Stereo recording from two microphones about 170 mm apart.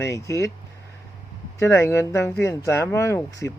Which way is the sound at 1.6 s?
15° left (ahead or behind).